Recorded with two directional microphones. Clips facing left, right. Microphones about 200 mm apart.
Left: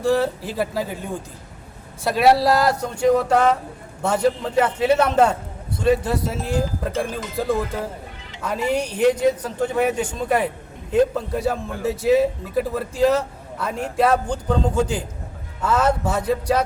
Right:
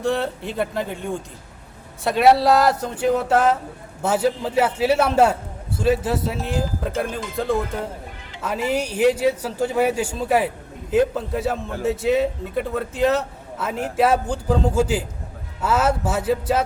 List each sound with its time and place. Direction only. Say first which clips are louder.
0.0 s a man's voice: left 3 dB; centre (ahead or behind)